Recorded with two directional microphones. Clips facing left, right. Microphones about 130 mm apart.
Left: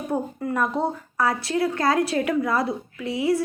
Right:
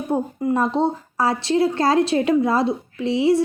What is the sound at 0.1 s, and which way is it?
Speech, 20° right (ahead or behind).